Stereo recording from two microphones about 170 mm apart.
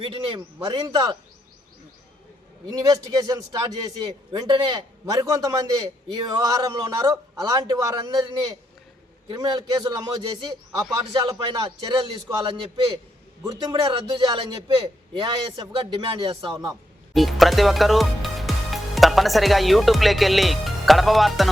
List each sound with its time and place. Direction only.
0.0 s a man's voice: 30° right (ahead or behind)
2.6 s a man's voice: 25° right (ahead or behind)
13.4 s a man's voice: 20° right (ahead or behind)
17.2 s speech: centre (ahead or behind)